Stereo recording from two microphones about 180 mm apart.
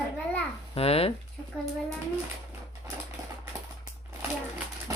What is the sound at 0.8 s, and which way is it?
Speech, 35° left (ahead or behind).